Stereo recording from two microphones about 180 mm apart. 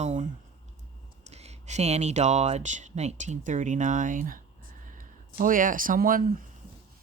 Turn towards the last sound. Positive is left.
turn(degrees=-50)  # may be behind; listen again after turning